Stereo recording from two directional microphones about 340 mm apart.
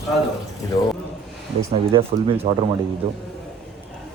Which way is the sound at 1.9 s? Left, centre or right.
Centre.